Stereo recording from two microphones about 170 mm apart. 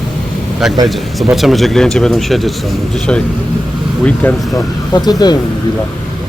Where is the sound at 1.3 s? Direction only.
Centre (ahead or behind).